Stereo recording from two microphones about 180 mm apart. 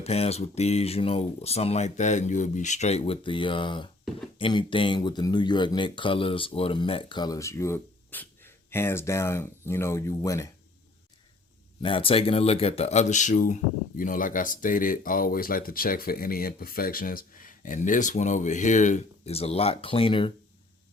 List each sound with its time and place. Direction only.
0.0 s speech: 35° left (ahead or behind); by 10.5 s 15° left (ahead or behind)
11.8 s speech: 30° left (ahead or behind)